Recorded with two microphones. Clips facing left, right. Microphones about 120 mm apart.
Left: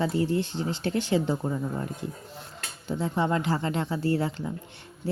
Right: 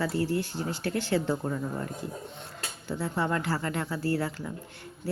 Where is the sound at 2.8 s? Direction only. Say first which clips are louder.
Left 3 dB; 20° left (ahead or behind).